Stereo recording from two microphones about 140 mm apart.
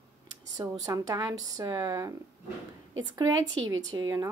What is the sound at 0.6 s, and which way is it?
Speech, 25° right (ahead or behind).